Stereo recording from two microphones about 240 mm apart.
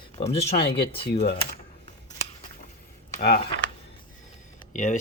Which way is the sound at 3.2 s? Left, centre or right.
Left.